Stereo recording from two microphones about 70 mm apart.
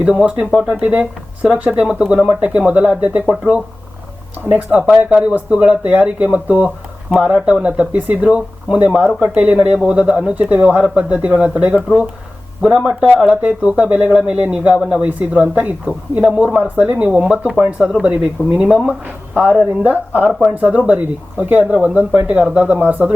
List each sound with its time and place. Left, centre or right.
0.0 s speech: centre
0.8 s speech: centre